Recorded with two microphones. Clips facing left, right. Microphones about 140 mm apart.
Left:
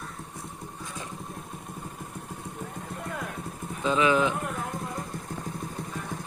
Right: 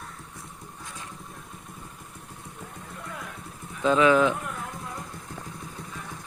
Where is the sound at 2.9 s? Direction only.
50° left (ahead or behind).